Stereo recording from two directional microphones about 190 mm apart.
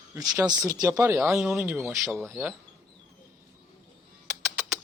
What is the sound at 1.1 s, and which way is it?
Speech, centre (ahead or behind).